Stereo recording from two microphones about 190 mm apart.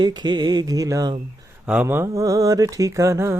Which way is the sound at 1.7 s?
10° right (ahead or behind).